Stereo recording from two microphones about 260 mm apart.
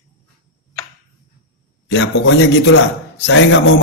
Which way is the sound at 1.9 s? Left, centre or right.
Left.